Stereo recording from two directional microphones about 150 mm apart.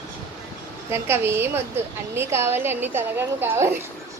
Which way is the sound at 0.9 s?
15° right (ahead or behind).